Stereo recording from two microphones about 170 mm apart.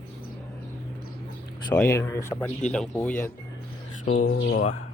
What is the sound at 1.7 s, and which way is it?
Speech, 15° left (ahead or behind).